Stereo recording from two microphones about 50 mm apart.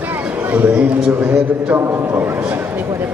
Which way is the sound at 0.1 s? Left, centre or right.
Right.